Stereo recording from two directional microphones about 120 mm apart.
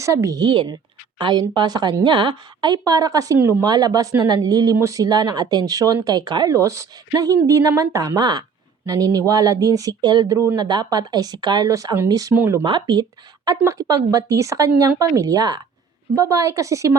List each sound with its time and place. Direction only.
0.0 s a woman's voice: 25° right (ahead or behind)
12.4 s a woman's voice: 20° right (ahead or behind)
12.6 s a woman's voice: 40° right (ahead or behind)